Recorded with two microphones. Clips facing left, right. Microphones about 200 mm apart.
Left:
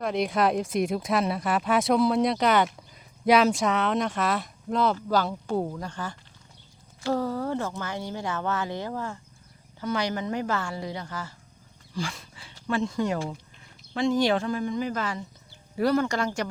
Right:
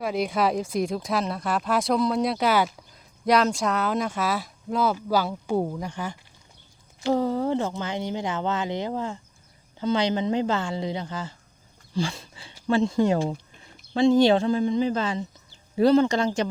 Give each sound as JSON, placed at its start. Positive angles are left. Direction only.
{"t": 0.0, "sound": "speech", "side_deg": 0}
{"t": 11.9, "sound": "a sound", "side_deg": -25}
{"t": 12.6, "sound": "speech", "side_deg": -25}